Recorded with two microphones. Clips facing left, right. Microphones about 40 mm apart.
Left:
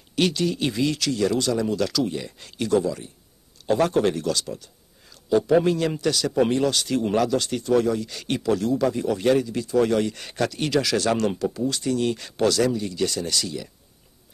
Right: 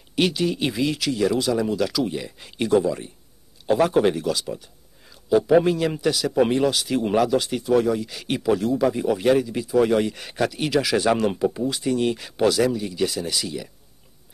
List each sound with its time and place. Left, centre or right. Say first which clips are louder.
0.1 s speech: right 1 dB; centre
3.6 s speech: right 2 dB; centre